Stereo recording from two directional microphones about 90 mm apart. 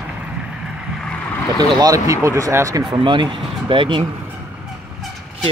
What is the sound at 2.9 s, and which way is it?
Speech, 60° right (ahead or behind).